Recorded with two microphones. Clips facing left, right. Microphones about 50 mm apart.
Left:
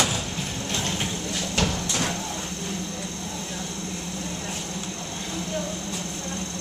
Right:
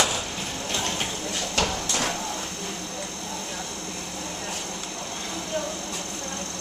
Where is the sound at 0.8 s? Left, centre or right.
Centre.